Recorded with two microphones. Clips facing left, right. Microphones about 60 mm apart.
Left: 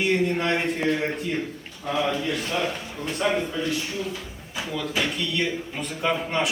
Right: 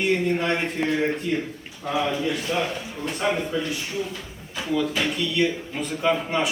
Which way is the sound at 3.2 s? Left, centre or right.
Centre.